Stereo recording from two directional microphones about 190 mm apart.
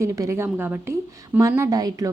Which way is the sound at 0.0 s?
15° right (ahead or behind).